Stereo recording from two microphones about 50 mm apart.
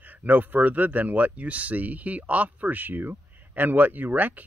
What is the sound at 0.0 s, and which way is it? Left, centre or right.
Speech, right.